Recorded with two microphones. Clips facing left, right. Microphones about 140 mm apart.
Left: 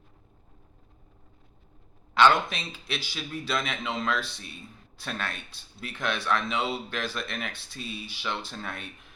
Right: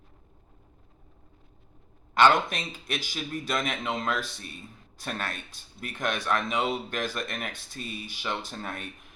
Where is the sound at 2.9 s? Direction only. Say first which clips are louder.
Right 1 dB; 15° right (ahead or behind).